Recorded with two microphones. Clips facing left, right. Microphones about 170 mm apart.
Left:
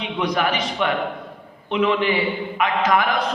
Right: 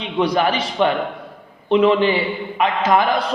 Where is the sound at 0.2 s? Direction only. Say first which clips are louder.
Right 4 dB; 30° right (ahead or behind).